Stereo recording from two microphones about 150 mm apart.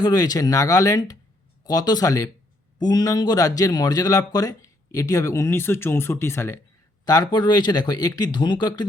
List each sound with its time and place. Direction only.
0.0 s a man's voice: 25° left (ahead or behind)